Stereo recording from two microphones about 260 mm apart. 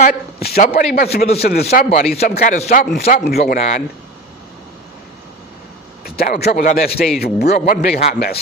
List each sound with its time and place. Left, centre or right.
0.0 s speech: left
3.6 s speech: left
6.1 s speech: left